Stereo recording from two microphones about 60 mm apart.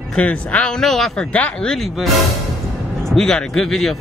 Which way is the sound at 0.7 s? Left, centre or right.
Centre.